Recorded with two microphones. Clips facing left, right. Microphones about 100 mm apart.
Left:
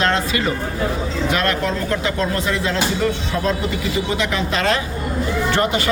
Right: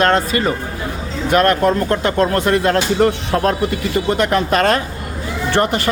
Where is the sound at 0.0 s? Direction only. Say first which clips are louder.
Right 4 dB; 45° right (ahead or behind).